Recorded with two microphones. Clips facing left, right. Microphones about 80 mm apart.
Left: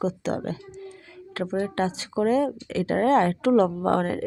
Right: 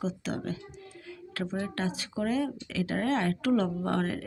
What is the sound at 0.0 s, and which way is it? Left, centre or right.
Speech, left.